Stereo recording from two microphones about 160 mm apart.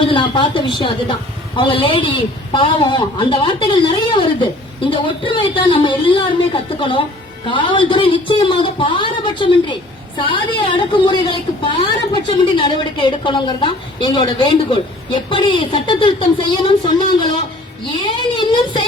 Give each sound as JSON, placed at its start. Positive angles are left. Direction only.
{"t": 0.0, "sound": "a man's voice", "side_deg": 30}